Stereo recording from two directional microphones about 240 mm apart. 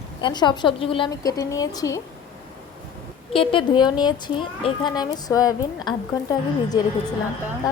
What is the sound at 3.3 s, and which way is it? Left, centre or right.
A woman's voice, left.